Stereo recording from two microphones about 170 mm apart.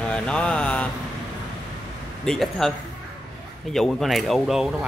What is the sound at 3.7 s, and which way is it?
Speech, centre (ahead or behind).